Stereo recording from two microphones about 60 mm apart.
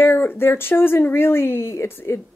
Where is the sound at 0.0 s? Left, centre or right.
Left.